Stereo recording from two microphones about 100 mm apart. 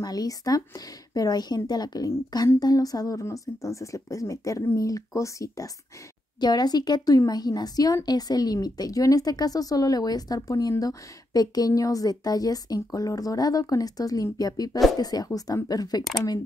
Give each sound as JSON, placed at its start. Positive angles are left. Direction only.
{"t": 0.0, "sound": "a woman's voice", "side_deg": 40}
{"t": 6.4, "sound": "a woman's voice", "side_deg": 45}